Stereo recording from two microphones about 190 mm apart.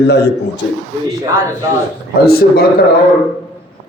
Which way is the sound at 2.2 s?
55° left (ahead or behind).